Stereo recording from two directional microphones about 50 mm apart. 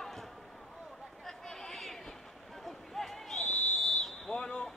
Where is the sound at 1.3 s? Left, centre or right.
Centre.